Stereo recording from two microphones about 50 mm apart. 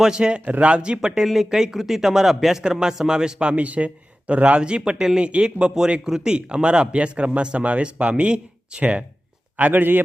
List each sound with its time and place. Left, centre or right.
0.0 s speech: centre
0.4 s speech: right
3.5 s a man's voice: right